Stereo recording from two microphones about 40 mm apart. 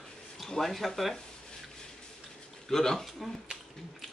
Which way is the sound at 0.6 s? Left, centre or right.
Centre.